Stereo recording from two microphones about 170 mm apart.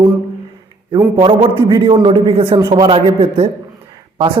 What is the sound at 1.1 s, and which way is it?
A man's voice, 30° right (ahead or behind).